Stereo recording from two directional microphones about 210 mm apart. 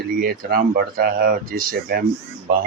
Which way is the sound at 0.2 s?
45° right (ahead or behind).